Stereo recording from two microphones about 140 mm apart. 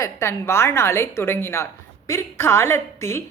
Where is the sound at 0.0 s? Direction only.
20° left (ahead or behind).